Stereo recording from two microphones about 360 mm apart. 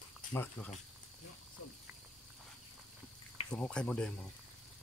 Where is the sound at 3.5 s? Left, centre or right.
Centre.